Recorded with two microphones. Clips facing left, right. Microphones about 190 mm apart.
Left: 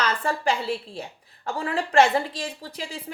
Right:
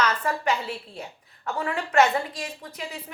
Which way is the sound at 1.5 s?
30° left (ahead or behind).